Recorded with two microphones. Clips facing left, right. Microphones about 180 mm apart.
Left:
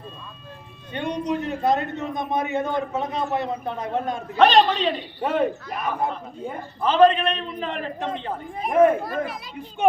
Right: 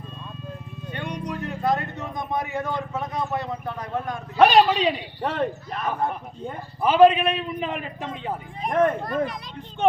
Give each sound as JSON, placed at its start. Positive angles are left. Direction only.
{"t": 0.9, "sound": "speech", "side_deg": 20}
{"t": 4.4, "sound": "a man's voice", "side_deg": -10}
{"t": 5.2, "sound": "a man's voice", "side_deg": 10}
{"t": 6.8, "sound": "a man's voice", "side_deg": -10}
{"t": 8.6, "sound": "a man's voice", "side_deg": 5}